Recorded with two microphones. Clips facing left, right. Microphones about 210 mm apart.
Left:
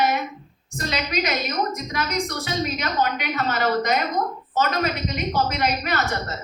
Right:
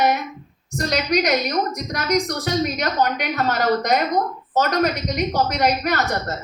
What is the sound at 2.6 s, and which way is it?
A woman's voice, 45° right (ahead or behind).